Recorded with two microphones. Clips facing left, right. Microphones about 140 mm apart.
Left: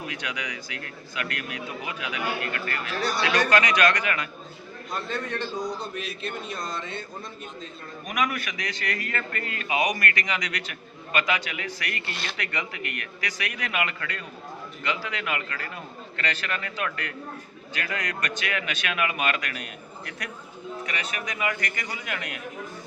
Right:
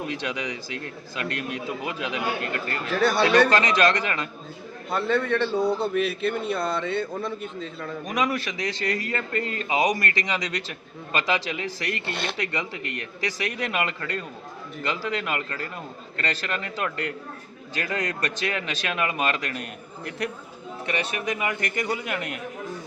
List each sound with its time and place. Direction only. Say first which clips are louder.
0.2 s a man's voice: right 4 dB; 25° right (ahead or behind)
3.0 s a man's voice: right 7 dB; 55° right (ahead or behind)
3.5 s a man's voice: right 1 dB; 30° right (ahead or behind)
4.9 s a man's voice: right 8 dB; 65° right (ahead or behind)
8.0 s a man's voice: right 2 dB; 25° right (ahead or behind)
20.8 s a man's voice: right 8 dB; 30° right (ahead or behind)